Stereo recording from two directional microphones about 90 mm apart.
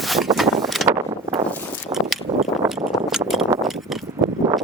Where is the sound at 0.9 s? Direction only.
75° right (ahead or behind).